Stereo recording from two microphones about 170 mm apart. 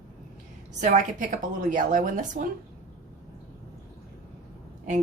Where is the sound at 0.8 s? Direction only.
50° right (ahead or behind).